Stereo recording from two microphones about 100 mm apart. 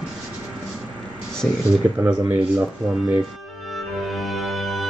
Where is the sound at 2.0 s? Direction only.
15° right (ahead or behind).